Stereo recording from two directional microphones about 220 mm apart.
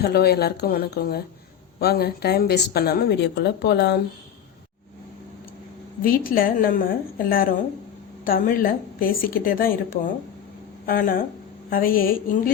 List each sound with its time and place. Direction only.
0.0 s a woman's voice: 45° left (ahead or behind)
6.0 s a woman's voice: 40° left (ahead or behind)